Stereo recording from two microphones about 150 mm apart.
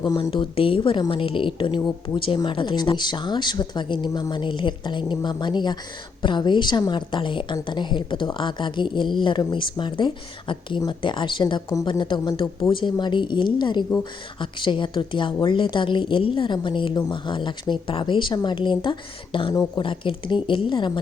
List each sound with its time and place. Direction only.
0.0 s a woman's voice: 30° left (ahead or behind)
12.7 s a woman's voice: 30° left (ahead or behind)